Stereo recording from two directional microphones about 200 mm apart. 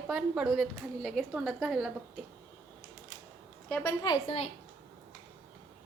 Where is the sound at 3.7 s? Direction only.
5° left (ahead or behind).